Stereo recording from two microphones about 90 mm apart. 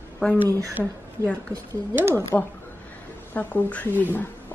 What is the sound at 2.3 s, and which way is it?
A woman's voice, 15° left (ahead or behind).